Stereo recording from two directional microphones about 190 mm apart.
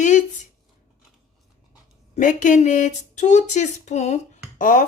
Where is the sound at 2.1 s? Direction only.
40° left (ahead or behind).